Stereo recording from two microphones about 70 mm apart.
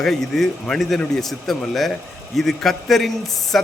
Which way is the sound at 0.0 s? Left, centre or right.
Centre.